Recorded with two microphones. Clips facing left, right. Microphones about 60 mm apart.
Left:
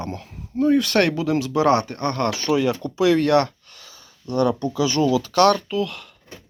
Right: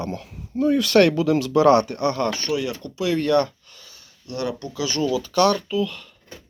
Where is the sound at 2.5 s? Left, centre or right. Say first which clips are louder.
Left 8 dB; left.